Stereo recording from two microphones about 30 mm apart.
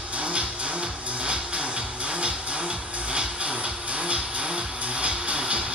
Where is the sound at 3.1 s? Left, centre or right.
Right.